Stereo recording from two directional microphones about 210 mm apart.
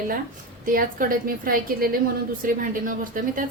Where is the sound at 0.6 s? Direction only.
40° right (ahead or behind).